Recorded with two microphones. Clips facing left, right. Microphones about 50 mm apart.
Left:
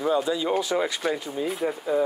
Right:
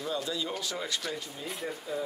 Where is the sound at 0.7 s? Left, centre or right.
Left.